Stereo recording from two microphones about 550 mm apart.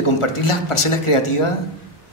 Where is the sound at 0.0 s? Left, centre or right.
Left.